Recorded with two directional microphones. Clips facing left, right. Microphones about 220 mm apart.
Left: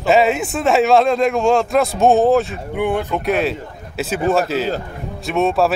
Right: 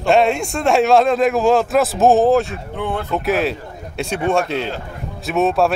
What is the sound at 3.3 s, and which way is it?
Speech, centre (ahead or behind).